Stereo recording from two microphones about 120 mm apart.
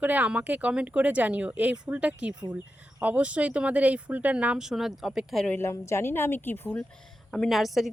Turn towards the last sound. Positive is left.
turn(degrees=0)  # may be behind; listen again after turning